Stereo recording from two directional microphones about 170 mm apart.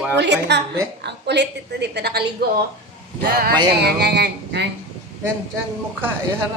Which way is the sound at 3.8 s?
75° right (ahead or behind).